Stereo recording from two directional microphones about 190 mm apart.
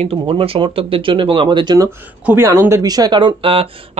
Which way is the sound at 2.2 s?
15° right (ahead or behind).